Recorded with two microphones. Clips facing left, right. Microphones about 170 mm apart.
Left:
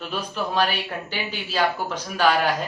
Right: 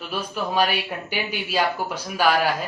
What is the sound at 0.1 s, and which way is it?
Speech, 10° right (ahead or behind).